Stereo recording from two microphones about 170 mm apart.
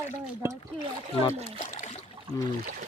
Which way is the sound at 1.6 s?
40° left (ahead or behind).